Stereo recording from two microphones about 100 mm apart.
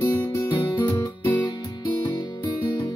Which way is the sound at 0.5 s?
50° left (ahead or behind).